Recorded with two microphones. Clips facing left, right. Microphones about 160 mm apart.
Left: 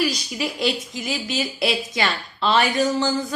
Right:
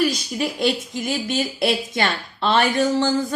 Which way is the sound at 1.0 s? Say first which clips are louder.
Right 3 dB; 50° right (ahead or behind).